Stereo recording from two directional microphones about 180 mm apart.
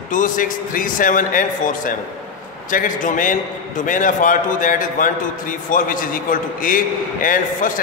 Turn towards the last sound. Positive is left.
turn(degrees=50)  # may be behind; listen again after turning